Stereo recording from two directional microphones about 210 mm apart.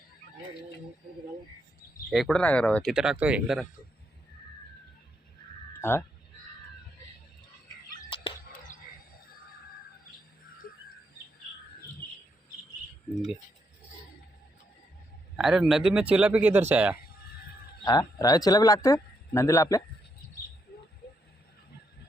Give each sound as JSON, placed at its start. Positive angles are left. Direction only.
{"t": 2.0, "sound": "speech", "side_deg": 0}
{"t": 5.8, "sound": "speech", "side_deg": 10}
{"t": 8.1, "sound": "chicken", "side_deg": 20}
{"t": 10.6, "sound": "bird", "side_deg": 40}
{"t": 15.4, "sound": "speech", "side_deg": 0}
{"t": 17.8, "sound": "speech", "side_deg": 15}